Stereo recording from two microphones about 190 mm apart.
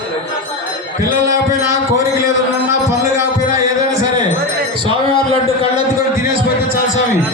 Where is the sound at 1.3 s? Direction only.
15° right (ahead or behind).